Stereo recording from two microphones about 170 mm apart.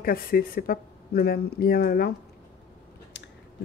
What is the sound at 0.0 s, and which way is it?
Speech, 60° left (ahead or behind).